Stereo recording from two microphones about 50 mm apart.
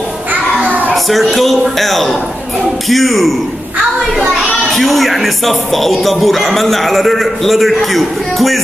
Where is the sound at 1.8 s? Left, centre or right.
Centre.